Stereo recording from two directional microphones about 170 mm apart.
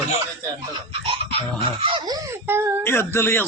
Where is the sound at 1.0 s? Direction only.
35° right (ahead or behind).